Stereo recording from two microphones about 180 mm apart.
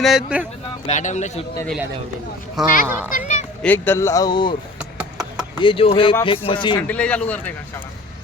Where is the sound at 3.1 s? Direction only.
45° left (ahead or behind).